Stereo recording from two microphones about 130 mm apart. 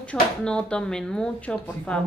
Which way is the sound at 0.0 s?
10° left (ahead or behind).